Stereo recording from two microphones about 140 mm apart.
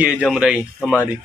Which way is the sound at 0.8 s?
10° left (ahead or behind).